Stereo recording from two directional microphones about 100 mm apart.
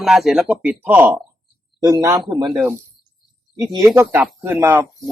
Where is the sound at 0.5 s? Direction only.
15° right (ahead or behind).